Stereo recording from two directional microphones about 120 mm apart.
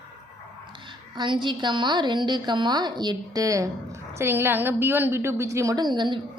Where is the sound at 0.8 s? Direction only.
40° right (ahead or behind).